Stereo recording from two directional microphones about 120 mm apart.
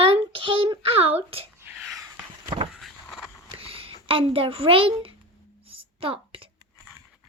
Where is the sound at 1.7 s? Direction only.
Centre (ahead or behind).